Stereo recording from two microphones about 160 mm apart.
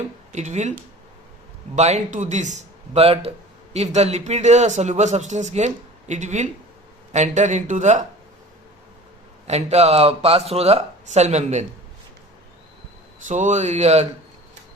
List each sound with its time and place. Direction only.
0.3 s speech: 45° right (ahead or behind)
1.7 s speech: 45° right (ahead or behind)
9.5 s speech: 40° right (ahead or behind)
13.2 s speech: 50° right (ahead or behind)